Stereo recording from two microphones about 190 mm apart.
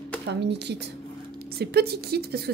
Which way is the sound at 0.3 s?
65° right (ahead or behind).